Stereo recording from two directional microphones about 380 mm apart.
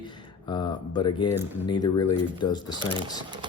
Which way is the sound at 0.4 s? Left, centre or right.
Centre.